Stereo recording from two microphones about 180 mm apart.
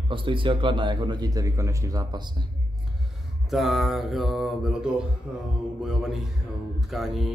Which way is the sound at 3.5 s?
Centre (ahead or behind).